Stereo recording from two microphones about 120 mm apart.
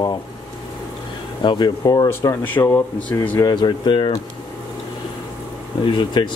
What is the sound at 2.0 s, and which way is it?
Speech, 15° left (ahead or behind).